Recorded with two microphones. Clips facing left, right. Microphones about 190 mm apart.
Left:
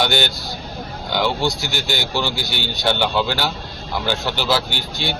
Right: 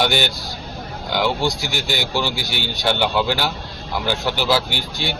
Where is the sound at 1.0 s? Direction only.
5° right (ahead or behind).